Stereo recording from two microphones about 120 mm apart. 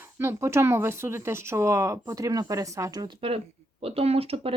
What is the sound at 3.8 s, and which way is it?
Speech, 55° right (ahead or behind).